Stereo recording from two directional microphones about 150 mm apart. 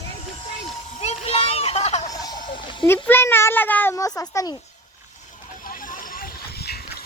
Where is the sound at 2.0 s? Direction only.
25° left (ahead or behind).